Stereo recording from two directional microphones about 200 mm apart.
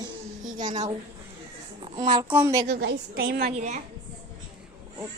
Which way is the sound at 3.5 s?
35° right (ahead or behind).